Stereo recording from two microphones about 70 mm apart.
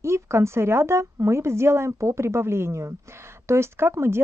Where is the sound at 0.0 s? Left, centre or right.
Right.